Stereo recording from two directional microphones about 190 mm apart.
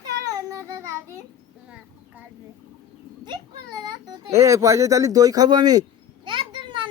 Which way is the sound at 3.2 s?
20° right (ahead or behind).